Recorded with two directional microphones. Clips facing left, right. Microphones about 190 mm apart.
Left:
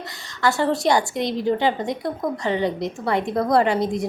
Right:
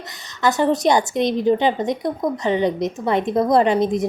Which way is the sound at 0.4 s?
20° right (ahead or behind).